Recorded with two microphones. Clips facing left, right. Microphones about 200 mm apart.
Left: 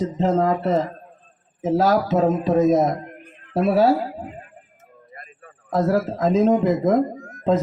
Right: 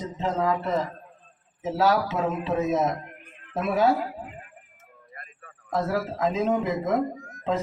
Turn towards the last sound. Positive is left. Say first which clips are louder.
# left 7 dB
turn(degrees=45)  # may be behind; listen again after turning